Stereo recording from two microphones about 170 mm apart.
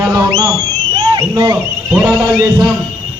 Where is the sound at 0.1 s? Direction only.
15° right (ahead or behind).